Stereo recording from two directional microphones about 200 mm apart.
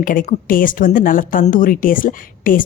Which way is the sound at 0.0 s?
45° left (ahead or behind).